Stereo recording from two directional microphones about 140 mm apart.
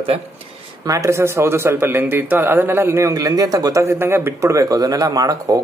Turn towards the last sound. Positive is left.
turn(degrees=-25)  # may be behind; listen again after turning